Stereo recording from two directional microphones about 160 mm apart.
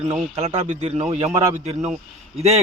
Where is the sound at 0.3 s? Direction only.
45° right (ahead or behind).